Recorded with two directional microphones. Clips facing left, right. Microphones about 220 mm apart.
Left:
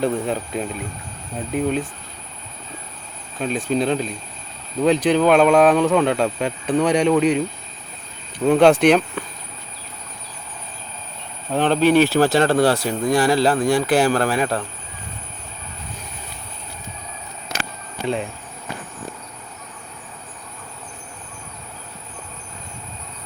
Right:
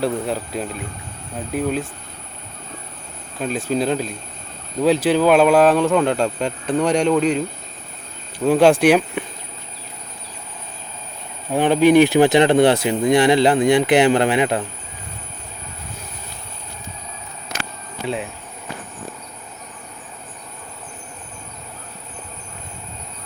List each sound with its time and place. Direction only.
0.0 s speech: 5° right (ahead or behind)
3.4 s speech: 5° right (ahead or behind)
8.4 s speech: centre (ahead or behind)
11.5 s speech: 10° right (ahead or behind)
18.0 s insect: 5° right (ahead or behind)